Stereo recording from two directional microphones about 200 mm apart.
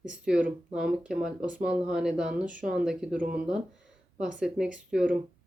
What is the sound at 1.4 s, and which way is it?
Speech, 40° right (ahead or behind).